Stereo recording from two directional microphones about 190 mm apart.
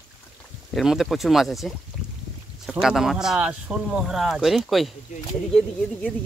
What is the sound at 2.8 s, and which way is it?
Speech, centre (ahead or behind).